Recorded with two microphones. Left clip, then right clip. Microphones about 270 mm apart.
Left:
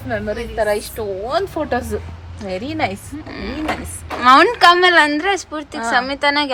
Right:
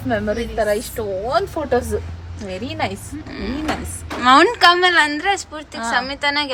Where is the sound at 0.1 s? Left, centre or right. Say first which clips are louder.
Right 2 dB; left.